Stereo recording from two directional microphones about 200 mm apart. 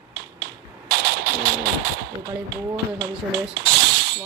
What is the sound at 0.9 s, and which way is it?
Music, 55° right (ahead or behind).